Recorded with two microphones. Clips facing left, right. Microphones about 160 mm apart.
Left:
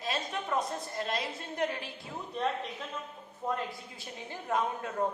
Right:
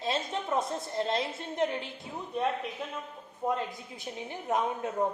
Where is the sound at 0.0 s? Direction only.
25° right (ahead or behind).